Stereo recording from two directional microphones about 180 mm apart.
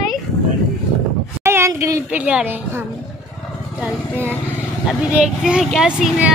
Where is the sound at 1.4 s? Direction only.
15° right (ahead or behind).